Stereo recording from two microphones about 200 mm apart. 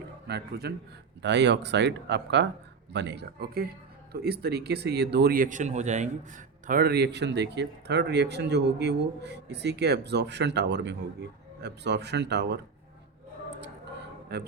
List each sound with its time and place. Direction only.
0.3 s speech: 55° right (ahead or behind)
14.3 s speech: 55° right (ahead or behind)